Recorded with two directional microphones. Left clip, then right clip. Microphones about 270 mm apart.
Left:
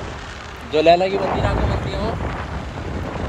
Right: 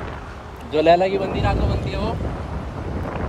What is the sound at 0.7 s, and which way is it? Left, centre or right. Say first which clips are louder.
Speech: left 1 dB; right.